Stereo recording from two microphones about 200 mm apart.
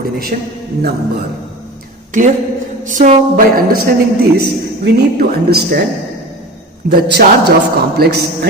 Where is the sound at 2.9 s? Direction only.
40° right (ahead or behind).